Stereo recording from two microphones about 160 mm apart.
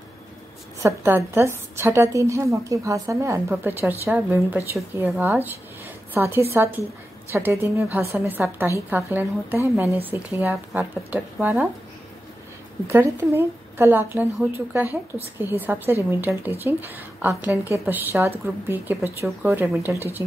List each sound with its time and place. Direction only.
0.8 s a woman's voice: 15° right (ahead or behind)
12.8 s a woman's voice: 15° right (ahead or behind)